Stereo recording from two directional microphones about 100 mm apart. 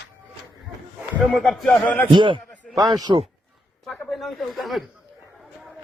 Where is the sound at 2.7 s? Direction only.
40° right (ahead or behind).